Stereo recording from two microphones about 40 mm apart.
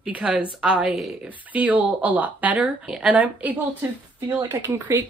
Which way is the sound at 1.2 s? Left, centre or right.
Right.